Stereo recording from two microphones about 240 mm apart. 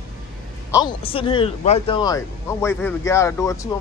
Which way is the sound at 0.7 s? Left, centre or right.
Centre.